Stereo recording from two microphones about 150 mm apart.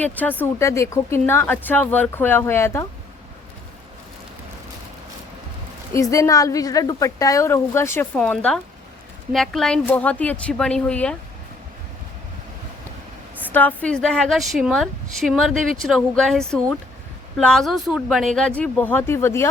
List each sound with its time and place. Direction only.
0.0 s speech: 10° left (ahead or behind)
5.9 s a woman's voice: 20° left (ahead or behind)
13.4 s a woman's voice: 10° left (ahead or behind)